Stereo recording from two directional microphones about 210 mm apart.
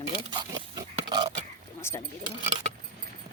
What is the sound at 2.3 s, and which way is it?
Speech, 30° right (ahead or behind).